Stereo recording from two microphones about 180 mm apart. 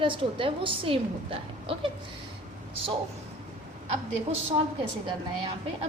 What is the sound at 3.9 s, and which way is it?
Speech, 35° right (ahead or behind).